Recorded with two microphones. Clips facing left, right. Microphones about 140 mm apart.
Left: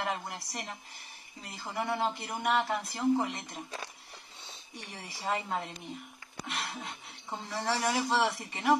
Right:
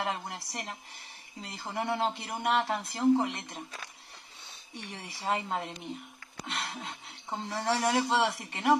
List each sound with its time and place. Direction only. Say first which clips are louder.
0.0 s speech: right 1 dB; 25° right (ahead or behind)
5.2 s speech: right 1 dB; 20° right (ahead or behind)